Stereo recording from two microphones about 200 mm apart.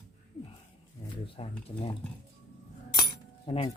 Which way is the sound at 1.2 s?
30° left (ahead or behind).